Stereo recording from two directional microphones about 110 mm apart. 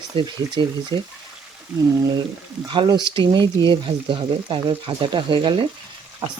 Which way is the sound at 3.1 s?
45° right (ahead or behind).